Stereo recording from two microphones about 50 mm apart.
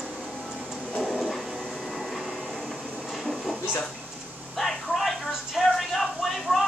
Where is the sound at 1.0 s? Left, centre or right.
Centre.